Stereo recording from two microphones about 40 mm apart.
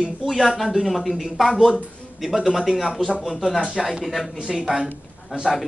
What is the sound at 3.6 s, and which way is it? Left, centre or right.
Speech, centre.